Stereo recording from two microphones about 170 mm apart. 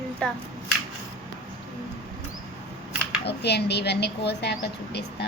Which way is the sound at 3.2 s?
75° left (ahead or behind).